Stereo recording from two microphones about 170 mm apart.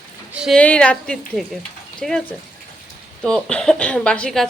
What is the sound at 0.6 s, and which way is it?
Speech, 5° left (ahead or behind).